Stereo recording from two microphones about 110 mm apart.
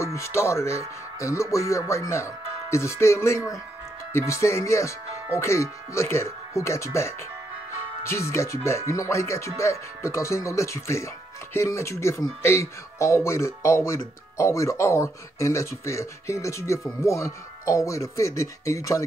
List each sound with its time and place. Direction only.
0.0 s speech: 25° left (ahead or behind)